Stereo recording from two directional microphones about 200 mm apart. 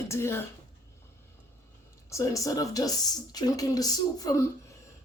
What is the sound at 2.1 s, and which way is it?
Speech, 15° left (ahead or behind).